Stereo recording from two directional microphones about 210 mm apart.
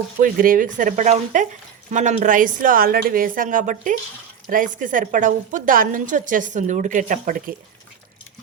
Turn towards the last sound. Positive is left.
turn(degrees=-40)  # may be behind; listen again after turning